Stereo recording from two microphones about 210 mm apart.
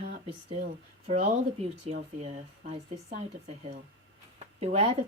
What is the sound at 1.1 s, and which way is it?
Speech, 30° right (ahead or behind).